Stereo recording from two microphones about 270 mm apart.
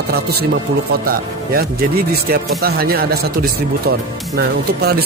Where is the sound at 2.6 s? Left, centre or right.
Right.